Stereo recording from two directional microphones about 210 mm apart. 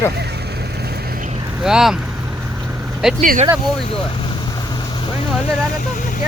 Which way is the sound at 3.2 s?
40° right (ahead or behind).